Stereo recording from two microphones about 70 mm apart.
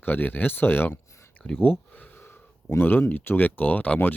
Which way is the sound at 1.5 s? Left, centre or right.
Left.